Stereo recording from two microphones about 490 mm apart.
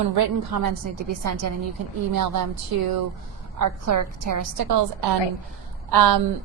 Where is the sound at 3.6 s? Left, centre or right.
Right.